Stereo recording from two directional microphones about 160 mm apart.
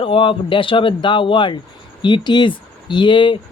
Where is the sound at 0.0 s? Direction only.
35° left (ahead or behind).